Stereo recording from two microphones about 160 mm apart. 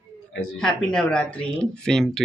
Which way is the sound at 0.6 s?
5° left (ahead or behind).